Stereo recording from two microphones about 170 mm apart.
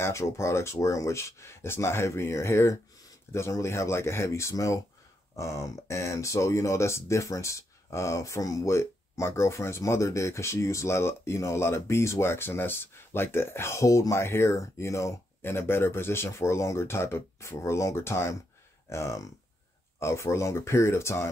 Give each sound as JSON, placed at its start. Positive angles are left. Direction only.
{"t": 0.0, "sound": "speech", "side_deg": 15}